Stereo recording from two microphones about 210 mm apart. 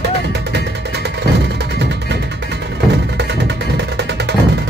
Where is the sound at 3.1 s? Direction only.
55° right (ahead or behind).